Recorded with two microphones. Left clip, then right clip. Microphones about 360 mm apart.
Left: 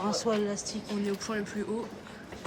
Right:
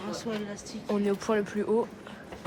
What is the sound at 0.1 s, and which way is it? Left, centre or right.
Speech, centre.